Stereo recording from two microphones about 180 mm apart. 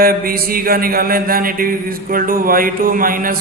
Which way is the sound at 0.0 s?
55° right (ahead or behind).